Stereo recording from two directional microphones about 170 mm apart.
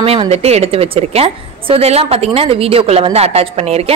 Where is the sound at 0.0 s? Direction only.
35° right (ahead or behind).